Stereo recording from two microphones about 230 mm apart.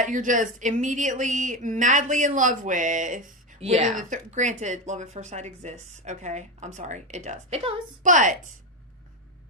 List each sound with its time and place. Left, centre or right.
0.0 s speech: right